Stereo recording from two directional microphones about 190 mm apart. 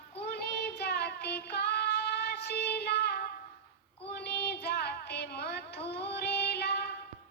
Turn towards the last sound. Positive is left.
turn(degrees=60)  # may be behind; listen again after turning